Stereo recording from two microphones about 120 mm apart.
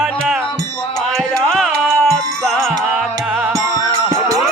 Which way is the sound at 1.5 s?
Centre (ahead or behind).